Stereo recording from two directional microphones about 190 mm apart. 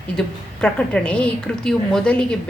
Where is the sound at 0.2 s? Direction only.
5° left (ahead or behind).